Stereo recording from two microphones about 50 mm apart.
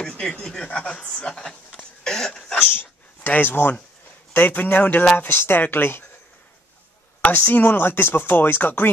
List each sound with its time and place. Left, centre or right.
0.0 s chuckle: centre
0.4 s speech: centre
1.8 s cough: centre
2.6 s dog: left
4.3 s speech: left
7.2 s speech: left